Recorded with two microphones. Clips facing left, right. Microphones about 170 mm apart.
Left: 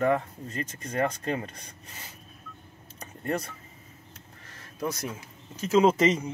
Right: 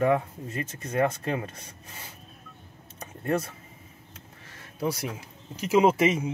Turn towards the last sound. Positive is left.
turn(degrees=-10)  # may be behind; listen again after turning